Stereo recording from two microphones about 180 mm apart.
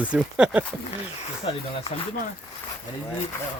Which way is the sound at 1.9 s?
35° left (ahead or behind).